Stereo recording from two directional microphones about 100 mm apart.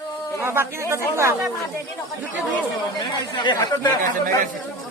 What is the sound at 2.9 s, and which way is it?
Speech, 50° left (ahead or behind).